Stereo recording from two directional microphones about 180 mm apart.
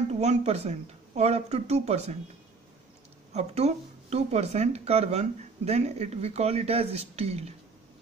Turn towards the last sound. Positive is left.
turn(degrees=-35)  # may be behind; listen again after turning